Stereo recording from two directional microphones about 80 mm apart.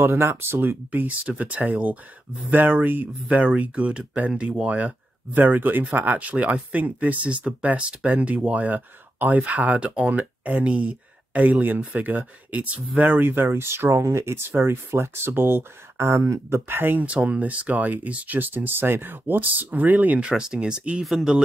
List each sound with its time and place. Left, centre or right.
0.0 s speech: right; by 21.4 s centre